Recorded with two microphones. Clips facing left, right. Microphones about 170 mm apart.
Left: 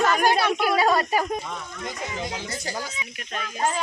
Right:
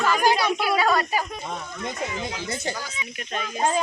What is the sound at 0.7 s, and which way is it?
Speech, 30° left (ahead or behind).